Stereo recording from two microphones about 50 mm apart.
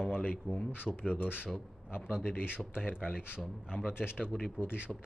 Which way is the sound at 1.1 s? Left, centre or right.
Left.